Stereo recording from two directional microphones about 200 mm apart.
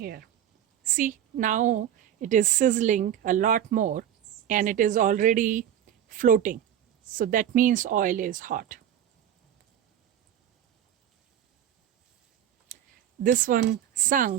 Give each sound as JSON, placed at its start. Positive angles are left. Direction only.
{"t": 0.0, "sound": "speech", "side_deg": -50}
{"t": 0.9, "sound": "speech", "side_deg": -40}
{"t": 13.2, "sound": "speech", "side_deg": -40}